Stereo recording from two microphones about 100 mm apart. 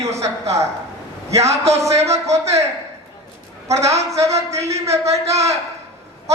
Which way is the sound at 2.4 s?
30° right (ahead or behind).